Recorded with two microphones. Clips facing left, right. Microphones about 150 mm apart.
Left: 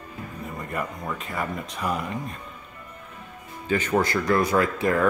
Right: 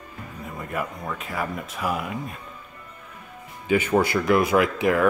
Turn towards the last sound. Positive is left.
turn(degrees=-10)  # may be behind; listen again after turning